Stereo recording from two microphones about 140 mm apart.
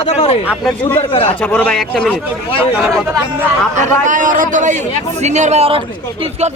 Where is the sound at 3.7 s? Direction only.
65° right (ahead or behind).